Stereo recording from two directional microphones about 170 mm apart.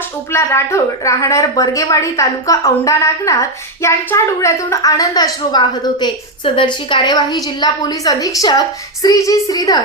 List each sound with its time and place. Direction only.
0.3 s a woman's voice: 15° left (ahead or behind)